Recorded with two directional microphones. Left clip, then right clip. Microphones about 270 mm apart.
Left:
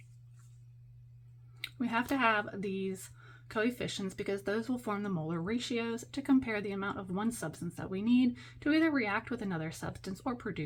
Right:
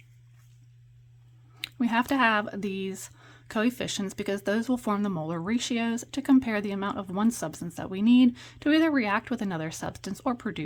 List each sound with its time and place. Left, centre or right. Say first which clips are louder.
1.8 s speech: right 6 dB; right